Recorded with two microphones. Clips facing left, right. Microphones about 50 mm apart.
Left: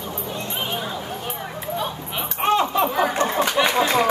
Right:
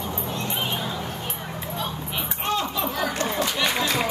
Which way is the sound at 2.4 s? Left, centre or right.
Left.